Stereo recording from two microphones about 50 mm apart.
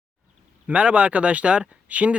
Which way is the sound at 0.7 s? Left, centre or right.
Right.